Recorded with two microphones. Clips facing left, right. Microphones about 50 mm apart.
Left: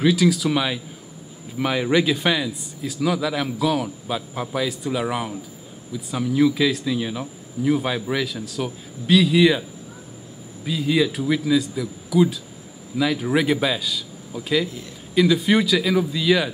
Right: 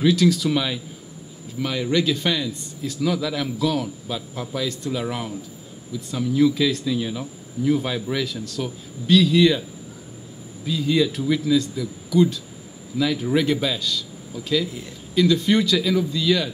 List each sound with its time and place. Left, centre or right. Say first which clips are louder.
0.0 s speech: even; centre